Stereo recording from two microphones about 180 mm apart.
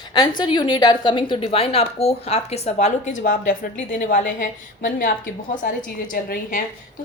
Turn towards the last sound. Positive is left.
turn(degrees=50)  # may be behind; listen again after turning